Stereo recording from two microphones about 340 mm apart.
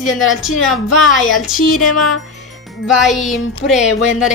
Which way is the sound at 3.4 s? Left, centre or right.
Left.